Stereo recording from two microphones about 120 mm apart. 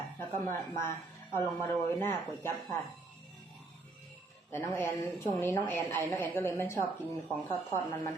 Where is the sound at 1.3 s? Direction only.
20° left (ahead or behind).